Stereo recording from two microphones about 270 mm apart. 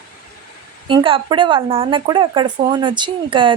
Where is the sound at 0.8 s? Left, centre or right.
Centre.